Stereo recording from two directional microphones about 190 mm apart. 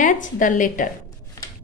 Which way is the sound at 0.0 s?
45° left (ahead or behind).